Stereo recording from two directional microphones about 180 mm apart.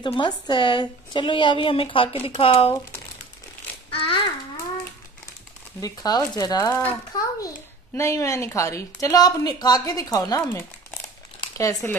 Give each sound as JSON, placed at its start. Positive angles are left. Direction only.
{"t": 0.0, "sound": "a child's voice", "side_deg": 25}
{"t": 3.9, "sound": "babbling", "side_deg": 30}
{"t": 5.8, "sound": "a child's voice", "side_deg": 20}